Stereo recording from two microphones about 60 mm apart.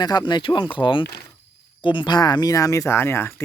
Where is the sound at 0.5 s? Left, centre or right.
Left.